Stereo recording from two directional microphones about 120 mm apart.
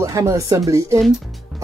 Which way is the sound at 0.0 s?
25° right (ahead or behind).